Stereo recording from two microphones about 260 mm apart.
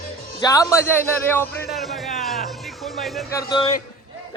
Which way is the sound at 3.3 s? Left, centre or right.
Centre.